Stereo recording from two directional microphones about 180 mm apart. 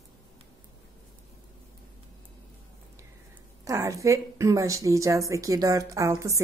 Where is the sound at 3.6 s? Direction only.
15° right (ahead or behind).